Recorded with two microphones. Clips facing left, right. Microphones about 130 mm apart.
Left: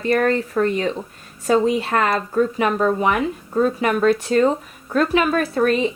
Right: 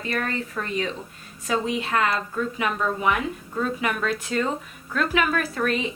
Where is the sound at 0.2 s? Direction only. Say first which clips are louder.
Left 10 dB; 45° left (ahead or behind).